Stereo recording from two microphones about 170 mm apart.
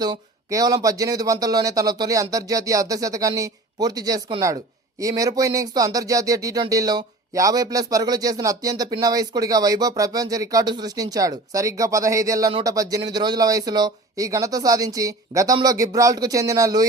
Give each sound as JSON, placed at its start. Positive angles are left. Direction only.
{"t": 0.0, "sound": "speech", "side_deg": -25}